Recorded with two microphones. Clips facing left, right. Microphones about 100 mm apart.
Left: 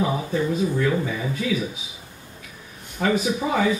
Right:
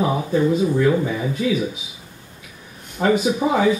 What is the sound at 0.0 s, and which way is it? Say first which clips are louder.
Speech: right 4 dB; 20° right (ahead or behind).